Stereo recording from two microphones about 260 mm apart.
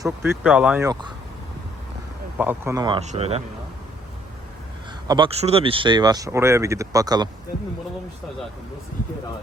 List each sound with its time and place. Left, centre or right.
0.0 s speech: centre
2.4 s speech: centre
5.0 s speech: centre